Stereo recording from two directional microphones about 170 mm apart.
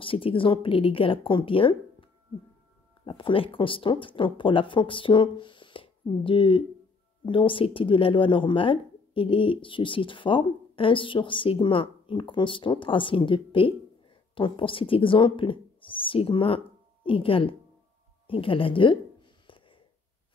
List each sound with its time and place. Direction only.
0.0 s speech: 30° left (ahead or behind)
3.1 s speech: 30° left (ahead or behind)